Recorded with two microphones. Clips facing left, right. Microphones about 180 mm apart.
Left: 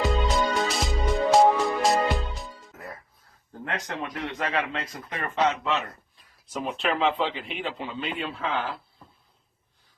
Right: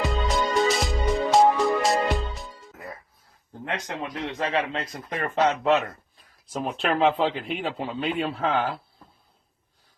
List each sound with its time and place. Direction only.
0.0 s music: centre (ahead or behind)
3.6 s speech: 20° right (ahead or behind); by 5.8 s 45° right (ahead or behind)
6.8 s a man's voice: 40° right (ahead or behind)